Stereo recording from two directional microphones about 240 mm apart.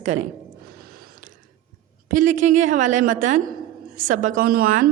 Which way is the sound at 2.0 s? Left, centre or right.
Right.